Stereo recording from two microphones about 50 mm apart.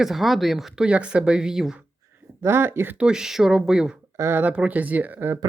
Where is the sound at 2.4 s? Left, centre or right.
Right.